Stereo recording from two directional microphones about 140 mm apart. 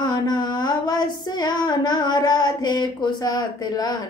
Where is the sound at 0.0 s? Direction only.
30° left (ahead or behind).